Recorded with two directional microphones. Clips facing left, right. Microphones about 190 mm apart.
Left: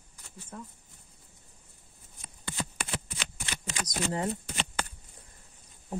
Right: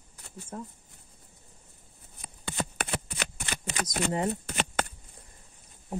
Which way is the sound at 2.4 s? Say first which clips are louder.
Right 4 dB; 60° right (ahead or behind).